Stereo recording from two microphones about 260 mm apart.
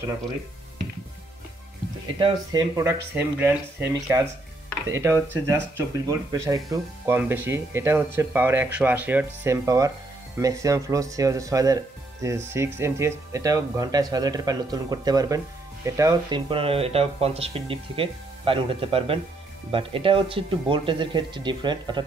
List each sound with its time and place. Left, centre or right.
2.1 s speech: centre